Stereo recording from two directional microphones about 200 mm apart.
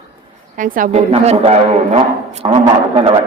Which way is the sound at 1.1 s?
30° right (ahead or behind).